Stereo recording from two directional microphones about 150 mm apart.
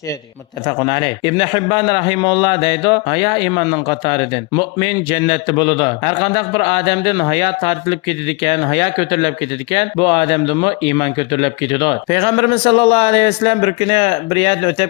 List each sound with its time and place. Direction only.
0.8 s speech: 30° left (ahead or behind)